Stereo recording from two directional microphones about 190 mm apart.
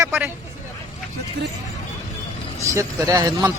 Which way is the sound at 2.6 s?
15° right (ahead or behind).